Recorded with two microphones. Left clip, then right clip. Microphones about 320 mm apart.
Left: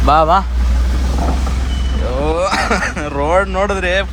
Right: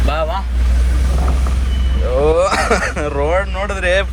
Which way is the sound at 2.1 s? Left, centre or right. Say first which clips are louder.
Right 3 dB; centre.